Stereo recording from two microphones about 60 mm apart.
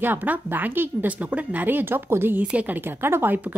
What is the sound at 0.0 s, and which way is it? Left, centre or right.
A woman's voice, right.